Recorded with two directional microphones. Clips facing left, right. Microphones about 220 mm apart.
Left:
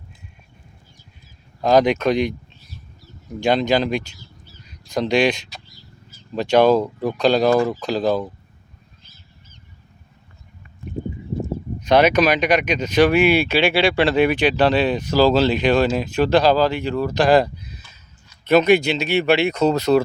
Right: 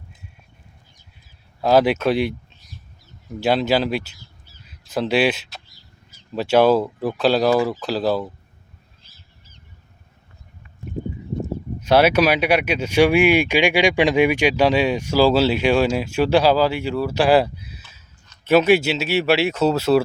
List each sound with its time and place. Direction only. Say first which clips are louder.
1.6 s speech: even; 5° right (ahead or behind)
3.4 s speech: left 1 dB; 5° right (ahead or behind)
11.8 s speech: even; 5° right (ahead or behind)